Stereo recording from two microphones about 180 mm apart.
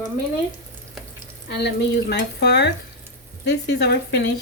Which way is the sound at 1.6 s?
70° left (ahead or behind).